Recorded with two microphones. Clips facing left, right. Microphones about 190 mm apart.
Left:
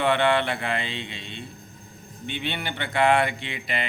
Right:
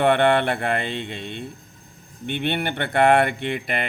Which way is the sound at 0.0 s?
55° right (ahead or behind).